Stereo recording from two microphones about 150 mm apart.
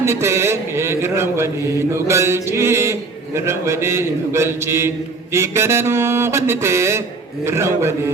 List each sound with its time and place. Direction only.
0.0 s mantra: 20° right (ahead or behind)
7.4 s a man's voice: 20° right (ahead or behind)